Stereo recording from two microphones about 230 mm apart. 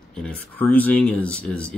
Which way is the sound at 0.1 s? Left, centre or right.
Centre.